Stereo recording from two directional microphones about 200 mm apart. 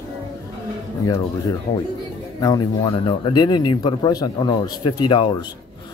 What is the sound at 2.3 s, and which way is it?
Speech, 20° left (ahead or behind).